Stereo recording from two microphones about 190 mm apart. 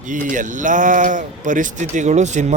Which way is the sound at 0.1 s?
45° right (ahead or behind).